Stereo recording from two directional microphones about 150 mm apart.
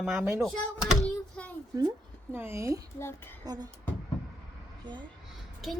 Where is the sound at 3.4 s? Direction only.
25° right (ahead or behind).